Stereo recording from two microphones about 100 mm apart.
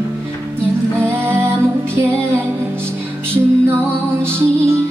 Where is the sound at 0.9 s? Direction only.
25° right (ahead or behind).